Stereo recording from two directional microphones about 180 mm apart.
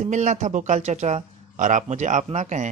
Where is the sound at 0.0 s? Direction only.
40° right (ahead or behind).